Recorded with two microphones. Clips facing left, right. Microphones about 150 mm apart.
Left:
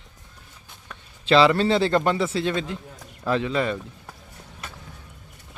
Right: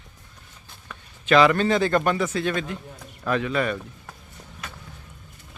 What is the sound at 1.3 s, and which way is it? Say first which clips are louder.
A man's voice: even; 25° left (ahead or behind).